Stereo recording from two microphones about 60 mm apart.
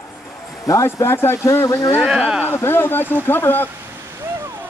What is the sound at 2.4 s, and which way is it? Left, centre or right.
A man's voice, left.